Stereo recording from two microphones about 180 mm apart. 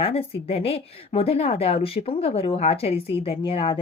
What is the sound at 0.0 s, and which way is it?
A woman's voice, 35° left (ahead or behind).